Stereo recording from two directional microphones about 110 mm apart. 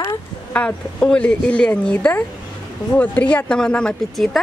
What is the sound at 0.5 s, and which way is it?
Speech, 10° left (ahead or behind).